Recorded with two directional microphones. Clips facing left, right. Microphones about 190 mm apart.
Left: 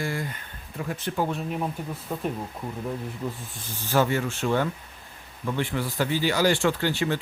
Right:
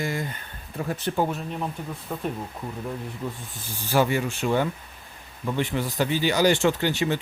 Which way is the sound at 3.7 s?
10° right (ahead or behind).